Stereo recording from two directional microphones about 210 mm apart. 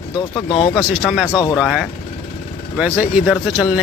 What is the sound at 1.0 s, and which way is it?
Speech, 5° right (ahead or behind).